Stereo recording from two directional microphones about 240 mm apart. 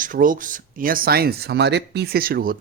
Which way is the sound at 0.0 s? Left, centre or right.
Right.